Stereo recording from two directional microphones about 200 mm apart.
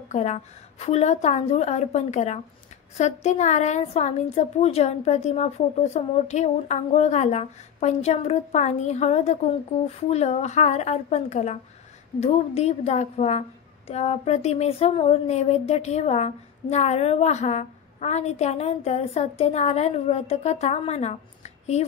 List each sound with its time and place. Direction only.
0.1 s speech: 35° left (ahead or behind)